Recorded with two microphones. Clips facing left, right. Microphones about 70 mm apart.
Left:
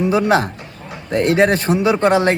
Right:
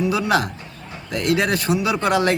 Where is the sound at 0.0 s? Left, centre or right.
Left.